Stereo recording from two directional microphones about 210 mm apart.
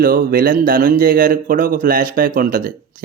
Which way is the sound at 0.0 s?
45° right (ahead or behind).